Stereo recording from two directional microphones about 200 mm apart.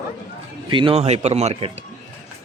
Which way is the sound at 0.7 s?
25° right (ahead or behind).